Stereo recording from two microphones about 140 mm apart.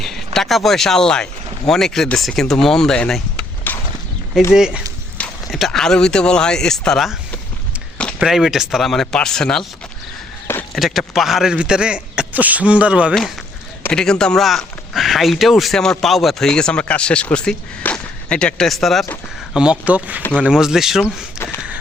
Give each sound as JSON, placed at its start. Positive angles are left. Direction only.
{"t": 0.3, "sound": "speech", "side_deg": 0}
{"t": 3.7, "sound": "a sound", "side_deg": 15}
{"t": 4.5, "sound": "speech", "side_deg": -5}
{"t": 8.2, "sound": "speech", "side_deg": 0}
{"t": 10.4, "sound": "a sound", "side_deg": 20}
{"t": 10.8, "sound": "speech", "side_deg": 0}
{"t": 13.9, "sound": "speech", "side_deg": 5}